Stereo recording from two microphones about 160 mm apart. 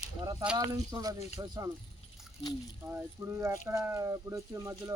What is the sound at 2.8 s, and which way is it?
Speech, 15° right (ahead or behind).